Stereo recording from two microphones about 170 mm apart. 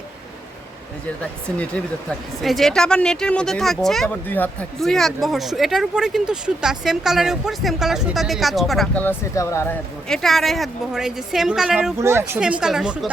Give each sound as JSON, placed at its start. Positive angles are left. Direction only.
{"t": 1.0, "sound": "speech", "side_deg": 5}
{"t": 9.0, "sound": "speech", "side_deg": 20}
{"t": 10.1, "sound": "speech", "side_deg": 0}
{"t": 11.9, "sound": "speech", "side_deg": -15}